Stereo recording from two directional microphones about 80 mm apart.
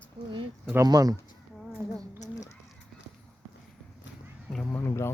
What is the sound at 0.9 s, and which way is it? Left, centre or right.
Speech, right.